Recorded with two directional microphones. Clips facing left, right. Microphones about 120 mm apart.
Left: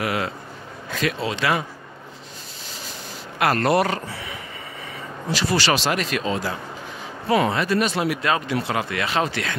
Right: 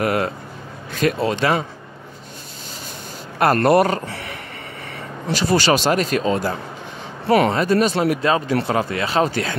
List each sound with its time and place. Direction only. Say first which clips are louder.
0.0 s speech: right 5 dB; 45° right (ahead or behind)
3.3 s speech: right 4 dB; 45° right (ahead or behind)
4.8 s a sound: right 3 dB; 60° right (ahead or behind)
5.5 s speech: right 5 dB; 45° right (ahead or behind)
7.2 s speech: right 4 dB; 65° right (ahead or behind)
7.5 s speech: right 4 dB; 40° right (ahead or behind)